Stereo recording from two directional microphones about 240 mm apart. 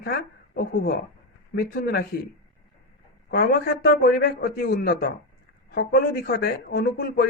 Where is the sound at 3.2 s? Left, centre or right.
Left.